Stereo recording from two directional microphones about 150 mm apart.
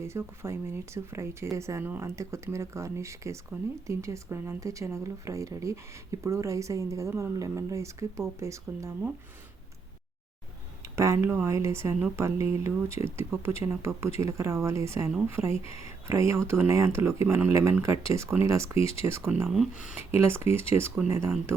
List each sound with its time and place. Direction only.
0.0 s speech: 20° right (ahead or behind)
10.8 s speech: 20° right (ahead or behind)